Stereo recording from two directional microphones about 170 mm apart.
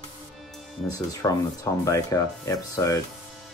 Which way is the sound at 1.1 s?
20° left (ahead or behind).